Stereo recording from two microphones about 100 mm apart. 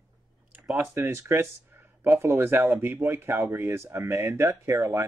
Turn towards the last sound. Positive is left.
turn(degrees=-30)  # may be behind; listen again after turning